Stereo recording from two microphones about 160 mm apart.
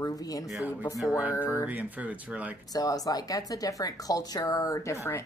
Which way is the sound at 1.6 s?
10° right (ahead or behind).